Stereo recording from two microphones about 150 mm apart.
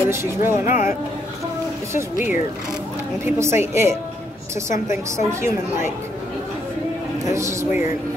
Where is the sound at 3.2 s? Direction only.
20° right (ahead or behind).